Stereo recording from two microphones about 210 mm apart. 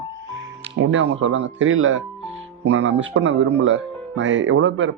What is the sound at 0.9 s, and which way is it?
Speech, 65° right (ahead or behind).